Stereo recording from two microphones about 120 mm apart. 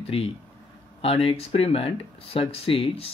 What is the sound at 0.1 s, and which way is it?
Speech, 50° left (ahead or behind).